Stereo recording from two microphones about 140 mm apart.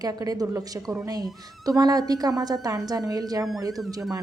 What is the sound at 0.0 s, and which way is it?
A woman's voice, 25° right (ahead or behind).